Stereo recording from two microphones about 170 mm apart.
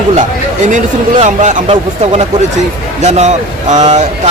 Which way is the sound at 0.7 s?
45° right (ahead or behind).